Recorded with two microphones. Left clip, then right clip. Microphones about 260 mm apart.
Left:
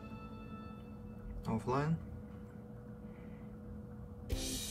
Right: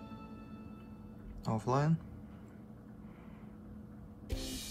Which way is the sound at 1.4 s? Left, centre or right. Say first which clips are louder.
Right 3 dB; centre.